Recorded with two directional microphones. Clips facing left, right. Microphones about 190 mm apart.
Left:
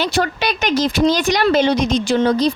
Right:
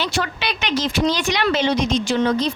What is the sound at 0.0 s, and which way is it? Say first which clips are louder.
A woman's voice: left 5 dB; 45° left (ahead or behind).